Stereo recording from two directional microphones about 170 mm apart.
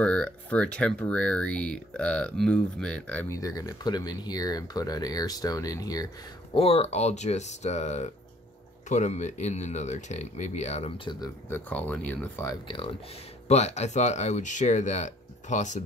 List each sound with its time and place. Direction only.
0.0 s speech: 5° left (ahead or behind)
6.5 s speech: 35° left (ahead or behind)
11.1 s speech: 20° left (ahead or behind)
12.6 s speech: 30° left (ahead or behind)